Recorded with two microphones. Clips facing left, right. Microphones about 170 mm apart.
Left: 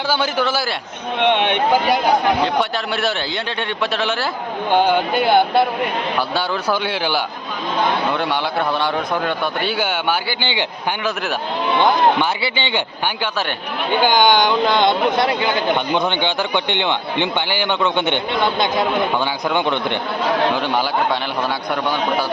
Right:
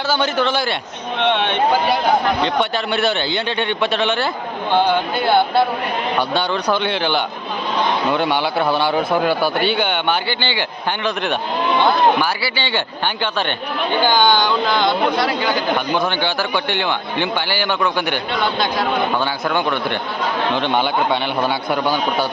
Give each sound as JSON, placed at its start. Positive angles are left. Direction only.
{"t": 0.1, "sound": "speech", "side_deg": 10}
{"t": 2.4, "sound": "a man's voice", "side_deg": 0}
{"t": 4.7, "sound": "a man's voice", "side_deg": 15}
{"t": 11.0, "sound": "a man's voice", "side_deg": 5}
{"t": 12.2, "sound": "speech", "side_deg": 20}
{"t": 14.0, "sound": "a man's voice", "side_deg": 15}
{"t": 20.6, "sound": "a man's voice", "side_deg": 5}